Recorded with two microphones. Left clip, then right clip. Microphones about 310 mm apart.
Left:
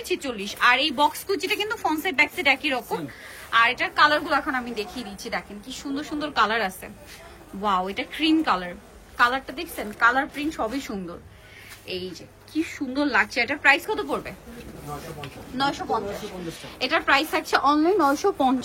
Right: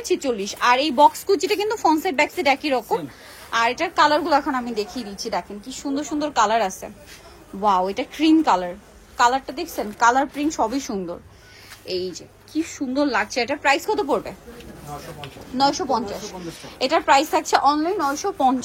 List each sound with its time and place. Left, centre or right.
0.0 s a woman's voice: centre
15.0 s speech: centre
15.5 s a woman's voice: centre
16.1 s speech: centre
16.4 s a woman's voice: centre